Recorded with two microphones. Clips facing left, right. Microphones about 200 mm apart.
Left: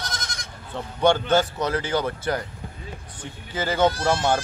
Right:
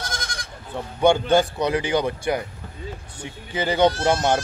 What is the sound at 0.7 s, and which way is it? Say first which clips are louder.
A man's voice: right 2 dB; 10° right (ahead or behind).